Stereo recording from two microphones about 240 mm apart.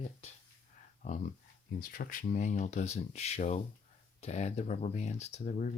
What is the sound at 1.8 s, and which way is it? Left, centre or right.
Speech, left.